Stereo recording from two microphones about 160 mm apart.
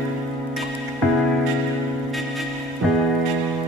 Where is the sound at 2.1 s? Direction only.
Centre (ahead or behind).